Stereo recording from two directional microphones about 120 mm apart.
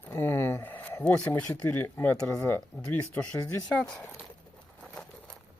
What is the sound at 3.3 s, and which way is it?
Speech, 25° left (ahead or behind).